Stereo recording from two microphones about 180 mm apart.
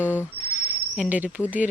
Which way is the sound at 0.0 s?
10° right (ahead or behind).